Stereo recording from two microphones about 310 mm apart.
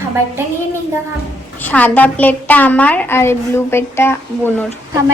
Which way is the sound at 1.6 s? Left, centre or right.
Centre.